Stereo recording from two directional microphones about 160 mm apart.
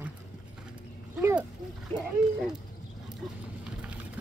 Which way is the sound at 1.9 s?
35° right (ahead or behind).